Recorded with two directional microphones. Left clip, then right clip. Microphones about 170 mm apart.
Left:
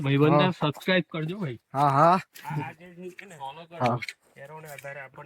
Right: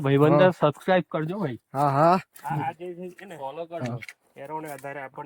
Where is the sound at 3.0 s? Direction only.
90° right.